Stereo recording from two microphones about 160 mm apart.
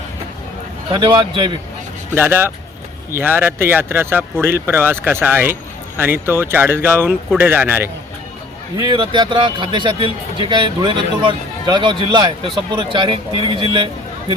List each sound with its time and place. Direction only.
0.9 s speech: 25° right (ahead or behind)
2.1 s speech: 15° right (ahead or behind)
8.8 s speech: 30° right (ahead or behind)